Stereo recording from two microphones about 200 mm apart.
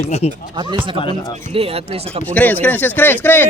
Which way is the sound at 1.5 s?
30° right (ahead or behind).